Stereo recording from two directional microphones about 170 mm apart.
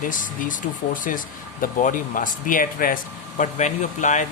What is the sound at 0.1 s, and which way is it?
Speech, 50° left (ahead or behind).